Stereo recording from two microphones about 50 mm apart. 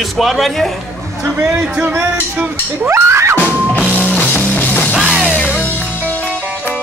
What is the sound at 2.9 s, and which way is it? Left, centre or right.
Music, right.